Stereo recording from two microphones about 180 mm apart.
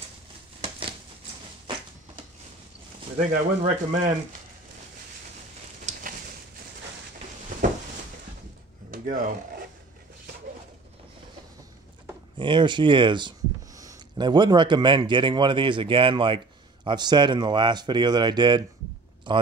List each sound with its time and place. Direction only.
0.6 s a sound: 30° right (ahead or behind)
3.2 s speech: 45° right (ahead or behind)
8.9 s speech: 50° right (ahead or behind)
12.4 s a man's voice: 25° right (ahead or behind)